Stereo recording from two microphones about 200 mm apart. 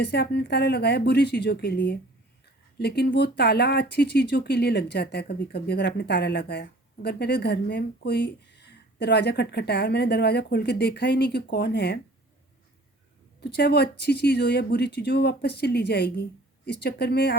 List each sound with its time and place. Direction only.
0.0 s speech: 55° left (ahead or behind)
13.4 s speech: 55° left (ahead or behind)